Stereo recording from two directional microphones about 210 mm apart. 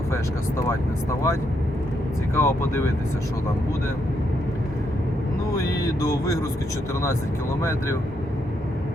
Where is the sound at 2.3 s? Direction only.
10° left (ahead or behind).